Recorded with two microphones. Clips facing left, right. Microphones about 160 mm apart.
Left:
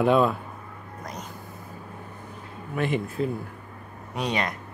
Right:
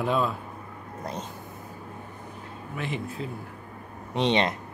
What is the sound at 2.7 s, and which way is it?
Speech, 55° left (ahead or behind).